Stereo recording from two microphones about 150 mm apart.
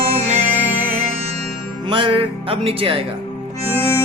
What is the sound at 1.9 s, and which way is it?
Music, 35° right (ahead or behind).